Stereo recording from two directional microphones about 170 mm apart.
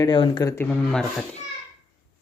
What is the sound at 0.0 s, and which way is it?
Speech, 25° left (ahead or behind).